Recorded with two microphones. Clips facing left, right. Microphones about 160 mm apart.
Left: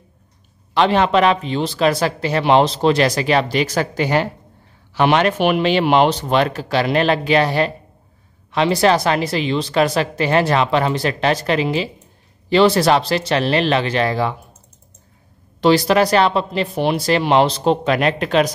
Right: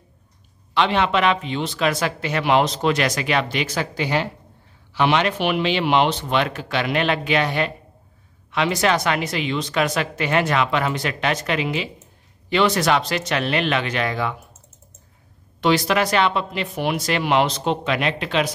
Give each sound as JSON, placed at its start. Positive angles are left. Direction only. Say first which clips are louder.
{"t": 0.7, "sound": "speech", "louder": "left 5 dB", "side_deg": 40}
{"t": 15.6, "sound": "speech", "louder": "left 5 dB", "side_deg": 35}